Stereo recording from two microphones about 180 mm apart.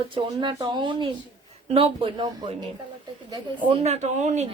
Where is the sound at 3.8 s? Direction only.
40° right (ahead or behind).